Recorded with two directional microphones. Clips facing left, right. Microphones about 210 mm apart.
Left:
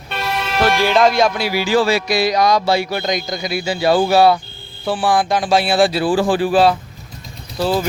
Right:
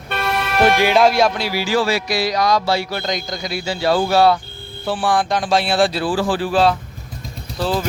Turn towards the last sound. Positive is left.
turn(degrees=5)  # may be behind; listen again after turning